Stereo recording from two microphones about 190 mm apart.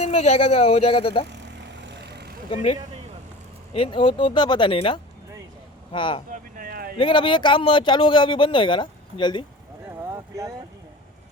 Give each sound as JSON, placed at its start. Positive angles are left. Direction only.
{"t": 0.0, "sound": "speech", "side_deg": 35}
{"t": 1.3, "sound": "vehicle", "side_deg": -65}
{"t": 2.5, "sound": "speech", "side_deg": 30}
{"t": 2.7, "sound": "speech", "side_deg": -30}
{"t": 3.8, "sound": "speech", "side_deg": 25}
{"t": 6.3, "sound": "a sound", "side_deg": -50}
{"t": 6.9, "sound": "speech", "side_deg": 25}
{"t": 10.2, "sound": "a sound", "side_deg": -15}